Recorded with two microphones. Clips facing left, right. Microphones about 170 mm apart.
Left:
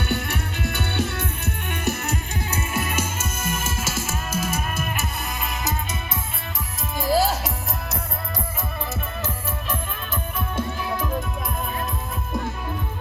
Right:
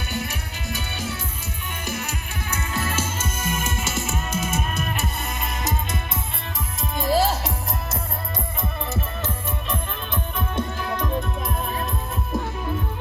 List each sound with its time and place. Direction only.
0.0 s music: 60° left (ahead or behind)
2.6 s music: 20° left (ahead or behind); by 5.7 s centre (ahead or behind)
6.9 s music: centre (ahead or behind)
9.0 s music: centre (ahead or behind)